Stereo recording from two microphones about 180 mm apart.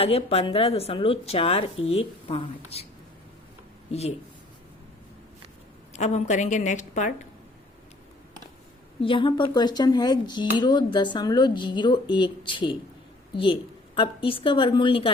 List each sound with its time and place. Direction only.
0.0 s speech: 35° left (ahead or behind)
5.9 s speech: 40° left (ahead or behind)
9.0 s speech: 30° left (ahead or behind)